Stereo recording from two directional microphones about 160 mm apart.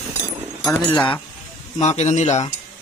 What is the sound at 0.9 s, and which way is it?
Speech, 30° left (ahead or behind).